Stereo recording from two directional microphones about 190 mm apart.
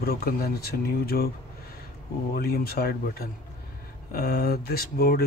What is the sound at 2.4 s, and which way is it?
Speech, 55° left (ahead or behind).